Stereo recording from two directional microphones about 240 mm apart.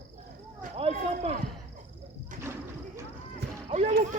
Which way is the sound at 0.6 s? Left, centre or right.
Right.